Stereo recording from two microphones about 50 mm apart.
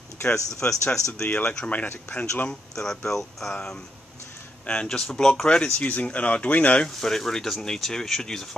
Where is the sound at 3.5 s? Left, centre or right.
Centre.